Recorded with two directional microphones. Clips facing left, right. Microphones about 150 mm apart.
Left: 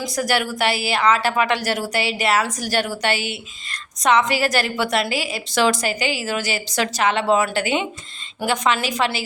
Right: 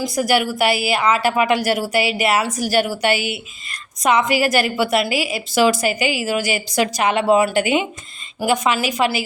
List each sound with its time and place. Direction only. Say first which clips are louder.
0.0 s a woman's voice: right 4 dB; 10° right (ahead or behind)